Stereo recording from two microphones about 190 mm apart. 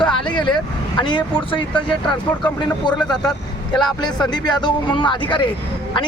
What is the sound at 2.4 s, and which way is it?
Speech, 25° left (ahead or behind).